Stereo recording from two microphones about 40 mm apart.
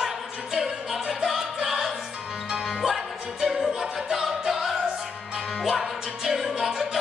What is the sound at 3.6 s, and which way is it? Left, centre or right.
Music, centre.